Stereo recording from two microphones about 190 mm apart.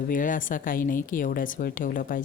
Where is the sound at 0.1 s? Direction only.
45° left (ahead or behind).